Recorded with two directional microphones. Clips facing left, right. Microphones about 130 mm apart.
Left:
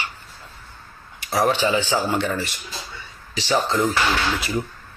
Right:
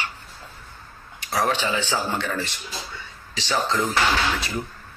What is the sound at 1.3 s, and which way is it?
Speech, 15° left (ahead or behind).